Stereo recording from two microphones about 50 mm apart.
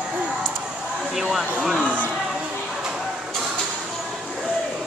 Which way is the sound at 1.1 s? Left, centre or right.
Centre.